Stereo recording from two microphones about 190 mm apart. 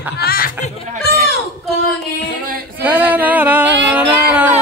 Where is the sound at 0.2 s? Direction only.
55° left (ahead or behind).